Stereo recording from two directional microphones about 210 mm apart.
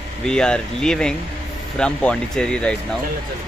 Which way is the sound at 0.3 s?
5° left (ahead or behind).